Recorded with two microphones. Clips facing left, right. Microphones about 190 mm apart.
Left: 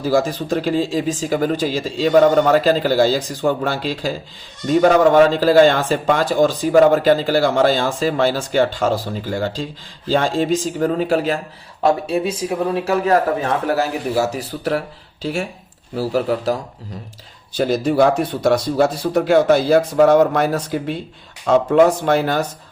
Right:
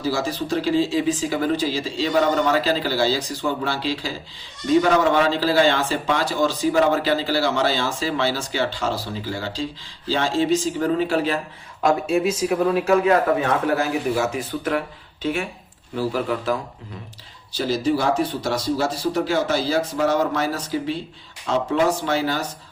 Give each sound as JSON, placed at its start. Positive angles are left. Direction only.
{"t": 0.0, "sound": "speech", "side_deg": 50}
{"t": 11.8, "sound": "speech", "side_deg": 35}
{"t": 17.6, "sound": "speech", "side_deg": 55}